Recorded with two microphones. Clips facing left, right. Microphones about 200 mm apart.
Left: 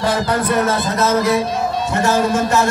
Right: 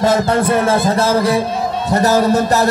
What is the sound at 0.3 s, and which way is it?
Speech, 30° right (ahead or behind).